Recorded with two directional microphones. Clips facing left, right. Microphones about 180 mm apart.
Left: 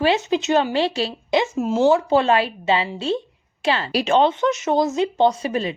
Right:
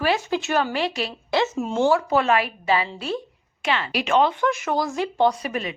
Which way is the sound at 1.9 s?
30° left (ahead or behind).